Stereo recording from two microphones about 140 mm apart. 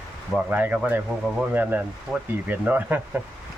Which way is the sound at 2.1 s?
Centre (ahead or behind).